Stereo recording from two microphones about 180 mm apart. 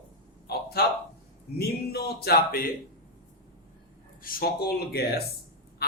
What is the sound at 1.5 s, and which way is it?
Speech, 60° left (ahead or behind).